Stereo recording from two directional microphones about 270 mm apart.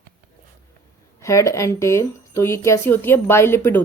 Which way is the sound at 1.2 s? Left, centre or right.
Centre.